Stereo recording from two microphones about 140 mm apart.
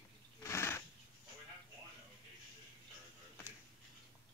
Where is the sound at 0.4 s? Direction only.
20° left (ahead or behind).